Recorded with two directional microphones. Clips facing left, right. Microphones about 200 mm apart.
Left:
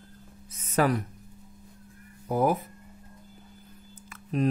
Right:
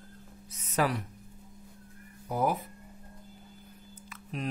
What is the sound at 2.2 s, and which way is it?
Speech, 50° left (ahead or behind).